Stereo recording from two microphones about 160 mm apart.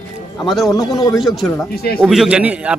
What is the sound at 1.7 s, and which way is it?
Speech, 75° left (ahead or behind).